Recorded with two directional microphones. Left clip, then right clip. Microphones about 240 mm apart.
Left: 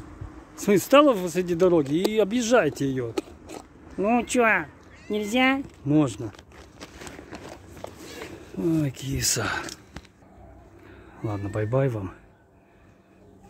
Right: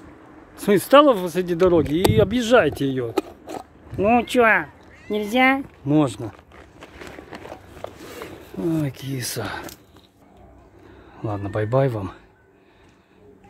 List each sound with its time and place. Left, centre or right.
0.6 s speech: centre
3.2 s biting: right
4.0 s speech: centre
7.8 s a sound: centre
11.1 s speech: centre